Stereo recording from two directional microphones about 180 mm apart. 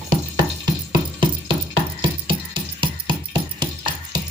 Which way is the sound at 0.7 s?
25° right (ahead or behind).